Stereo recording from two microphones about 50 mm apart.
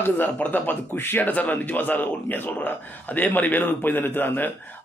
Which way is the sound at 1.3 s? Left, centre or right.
Left.